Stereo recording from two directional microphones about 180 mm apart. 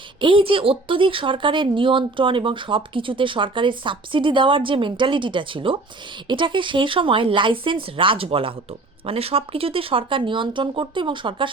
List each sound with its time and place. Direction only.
0.2 s speech: 30° right (ahead or behind)